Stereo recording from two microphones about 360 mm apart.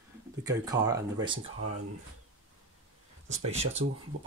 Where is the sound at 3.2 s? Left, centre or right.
Centre.